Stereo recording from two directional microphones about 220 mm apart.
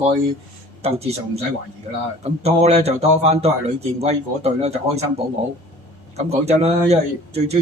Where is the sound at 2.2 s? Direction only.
30° right (ahead or behind).